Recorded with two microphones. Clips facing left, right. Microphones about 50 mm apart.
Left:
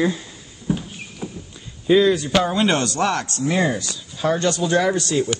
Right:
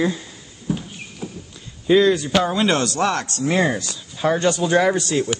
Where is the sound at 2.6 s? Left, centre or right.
Left.